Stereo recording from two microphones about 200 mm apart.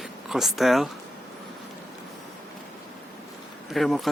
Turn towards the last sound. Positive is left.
turn(degrees=0)  # may be behind; listen again after turning